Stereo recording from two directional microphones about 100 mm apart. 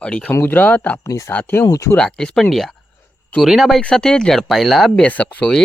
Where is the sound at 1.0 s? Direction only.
30° left (ahead or behind).